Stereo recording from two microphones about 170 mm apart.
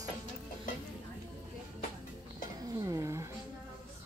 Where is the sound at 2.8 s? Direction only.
20° right (ahead or behind).